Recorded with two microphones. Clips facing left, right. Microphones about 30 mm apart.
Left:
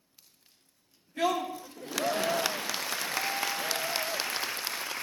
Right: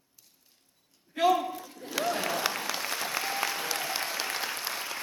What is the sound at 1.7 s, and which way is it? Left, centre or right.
Applause, centre.